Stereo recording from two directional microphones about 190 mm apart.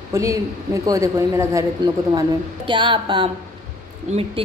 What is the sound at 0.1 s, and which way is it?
A woman's voice, 15° right (ahead or behind).